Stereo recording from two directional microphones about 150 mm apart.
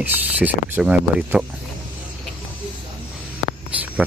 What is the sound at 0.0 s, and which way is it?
Speech, 10° right (ahead or behind).